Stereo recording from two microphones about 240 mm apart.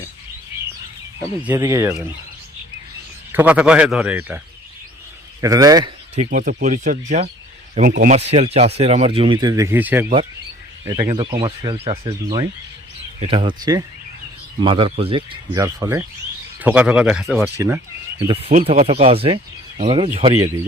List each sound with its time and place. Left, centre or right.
1.5 s speech: centre
3.3 s speech: centre
5.4 s speech: centre
6.1 s speech: right; by 17.7 s centre
18.3 s speech: right